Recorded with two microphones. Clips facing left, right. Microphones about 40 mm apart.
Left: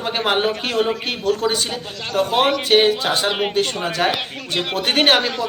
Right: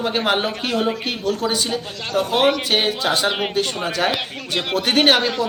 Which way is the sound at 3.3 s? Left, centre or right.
Centre.